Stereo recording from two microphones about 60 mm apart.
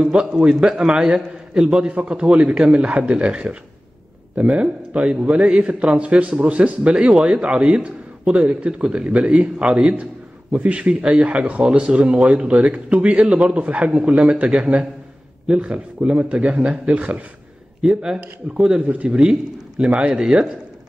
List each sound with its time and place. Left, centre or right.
0.0 s a man's voice: centre
17.8 s a man's voice: centre
18.8 s a man's voice: right